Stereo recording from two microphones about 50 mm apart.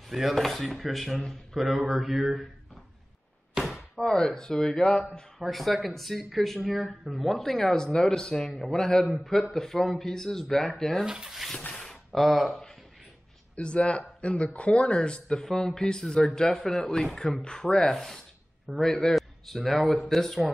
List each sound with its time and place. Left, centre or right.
0.0 s speech: centre
3.9 s speech: centre
5.4 s speech: centre
8.5 s speech: centre
8.7 s speech: centre
9.0 s speech: centre
11.1 s speech: centre
11.5 s a sound: centre
11.8 s a sound: centre
13.6 s a man's voice: left